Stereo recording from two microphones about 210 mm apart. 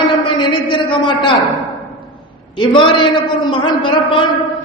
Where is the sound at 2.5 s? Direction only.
20° left (ahead or behind).